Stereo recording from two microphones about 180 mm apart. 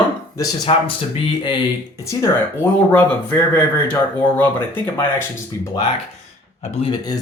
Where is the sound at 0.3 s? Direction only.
20° left (ahead or behind).